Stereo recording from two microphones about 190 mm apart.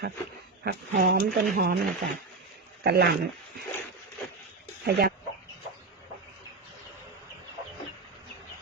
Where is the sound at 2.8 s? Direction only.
60° right (ahead or behind).